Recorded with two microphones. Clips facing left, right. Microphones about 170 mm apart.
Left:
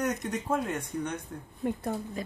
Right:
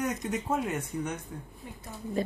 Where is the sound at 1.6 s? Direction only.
60° left (ahead or behind).